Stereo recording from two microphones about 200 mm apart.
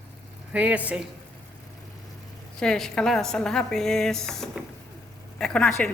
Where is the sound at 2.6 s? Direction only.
5° left (ahead or behind).